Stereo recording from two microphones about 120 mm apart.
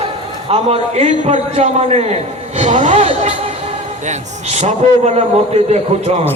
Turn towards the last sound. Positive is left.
turn(degrees=-65)  # may be behind; listen again after turning